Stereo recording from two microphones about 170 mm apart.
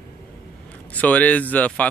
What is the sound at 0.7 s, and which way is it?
A man's voice, 10° left (ahead or behind).